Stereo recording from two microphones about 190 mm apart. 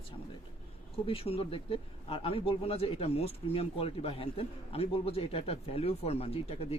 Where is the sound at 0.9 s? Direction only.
30° left (ahead or behind).